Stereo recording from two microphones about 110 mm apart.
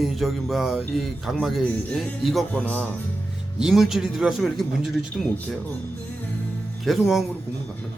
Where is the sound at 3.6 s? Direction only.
Centre (ahead or behind).